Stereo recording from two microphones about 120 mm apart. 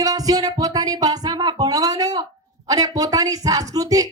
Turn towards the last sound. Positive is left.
turn(degrees=-30)  # may be behind; listen again after turning